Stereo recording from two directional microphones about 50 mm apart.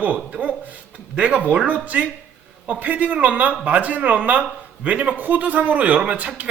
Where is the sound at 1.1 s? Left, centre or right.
Right.